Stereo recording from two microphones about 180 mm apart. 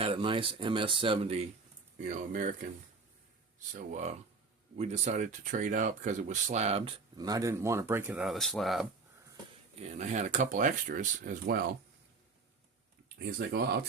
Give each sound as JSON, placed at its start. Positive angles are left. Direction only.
{"t": 0.0, "sound": "speech", "side_deg": -30}
{"t": 2.0, "sound": "speech", "side_deg": -45}
{"t": 3.9, "sound": "speech", "side_deg": -40}
{"t": 7.2, "sound": "speech", "side_deg": -20}
{"t": 9.8, "sound": "speech", "side_deg": -40}
{"t": 13.1, "sound": "speech", "side_deg": -65}